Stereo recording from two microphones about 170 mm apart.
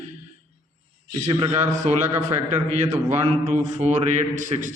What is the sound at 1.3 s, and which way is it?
Speech, 30° right (ahead or behind).